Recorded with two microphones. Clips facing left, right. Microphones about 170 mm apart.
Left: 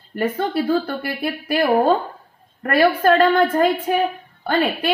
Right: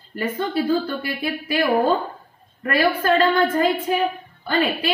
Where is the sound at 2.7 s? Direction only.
55° left (ahead or behind).